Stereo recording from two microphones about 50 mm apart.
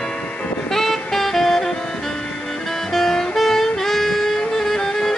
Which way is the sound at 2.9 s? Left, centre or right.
Centre.